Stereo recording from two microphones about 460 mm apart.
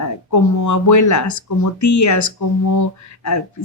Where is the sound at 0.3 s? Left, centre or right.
Left.